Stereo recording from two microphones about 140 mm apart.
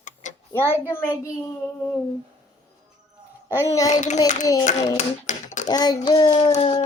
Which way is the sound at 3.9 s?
55° left (ahead or behind).